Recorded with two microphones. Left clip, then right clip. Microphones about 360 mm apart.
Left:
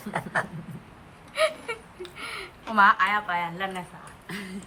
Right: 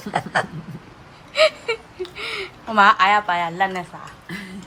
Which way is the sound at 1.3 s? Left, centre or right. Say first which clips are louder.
Right 8 dB; centre.